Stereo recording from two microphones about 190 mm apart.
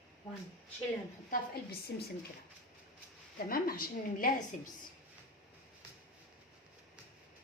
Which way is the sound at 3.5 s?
50° left (ahead or behind).